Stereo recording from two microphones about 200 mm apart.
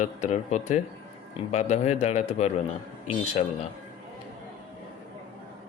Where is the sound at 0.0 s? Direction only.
35° left (ahead or behind).